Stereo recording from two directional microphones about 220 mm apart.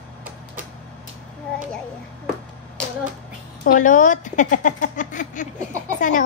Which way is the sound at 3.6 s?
35° left (ahead or behind).